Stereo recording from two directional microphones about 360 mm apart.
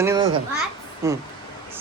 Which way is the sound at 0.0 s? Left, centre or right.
Centre.